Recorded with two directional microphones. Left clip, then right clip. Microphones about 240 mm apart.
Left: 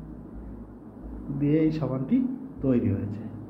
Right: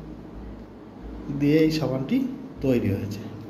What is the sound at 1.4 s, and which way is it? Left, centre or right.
Speech, centre.